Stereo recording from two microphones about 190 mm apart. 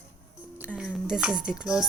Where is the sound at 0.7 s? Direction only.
5° left (ahead or behind).